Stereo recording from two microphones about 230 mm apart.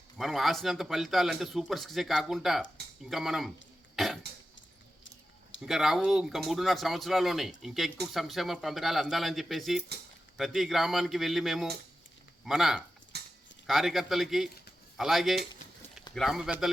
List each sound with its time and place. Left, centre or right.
0.2 s a man's voice: centre
3.9 s cough: centre
5.6 s a man's voice: centre
13.1 s clip-clop: right
13.7 s a man's voice: centre